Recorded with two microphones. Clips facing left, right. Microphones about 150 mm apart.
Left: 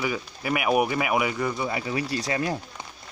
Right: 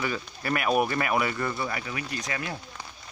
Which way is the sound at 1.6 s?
25° left (ahead or behind).